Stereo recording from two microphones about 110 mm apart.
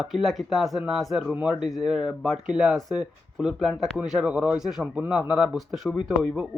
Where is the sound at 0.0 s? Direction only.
Centre (ahead or behind).